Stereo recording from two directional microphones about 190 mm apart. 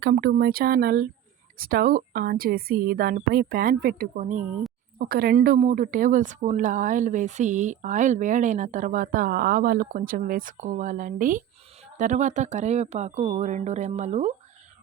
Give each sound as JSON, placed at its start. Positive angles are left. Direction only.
{"t": 0.0, "sound": "speech", "side_deg": -55}
{"t": 4.9, "sound": "speech", "side_deg": -55}